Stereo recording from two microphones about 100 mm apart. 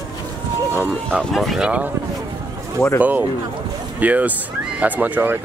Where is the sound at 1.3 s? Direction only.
5° right (ahead or behind).